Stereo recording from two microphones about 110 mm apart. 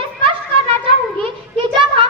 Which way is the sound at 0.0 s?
55° right (ahead or behind).